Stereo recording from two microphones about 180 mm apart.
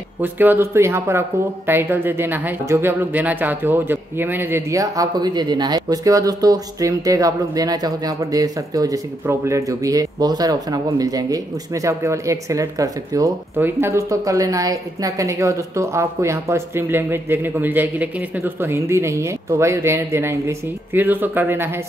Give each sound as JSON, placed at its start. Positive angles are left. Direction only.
{"t": 0.2, "sound": "speech", "side_deg": -10}